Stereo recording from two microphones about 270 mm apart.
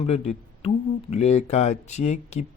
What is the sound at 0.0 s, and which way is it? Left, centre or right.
Speech, left.